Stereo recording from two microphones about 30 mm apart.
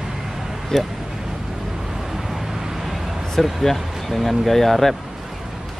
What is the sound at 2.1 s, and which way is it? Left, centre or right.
Vehicle, centre.